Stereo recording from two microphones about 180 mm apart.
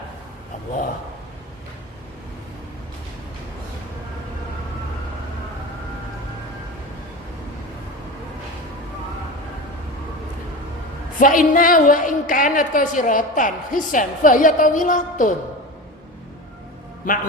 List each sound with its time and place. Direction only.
11.2 s a woman's voice: 50° left (ahead or behind)
17.0 s a woman's voice: 45° left (ahead or behind)